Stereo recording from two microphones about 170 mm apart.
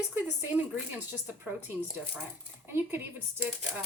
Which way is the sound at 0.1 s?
10° right (ahead or behind).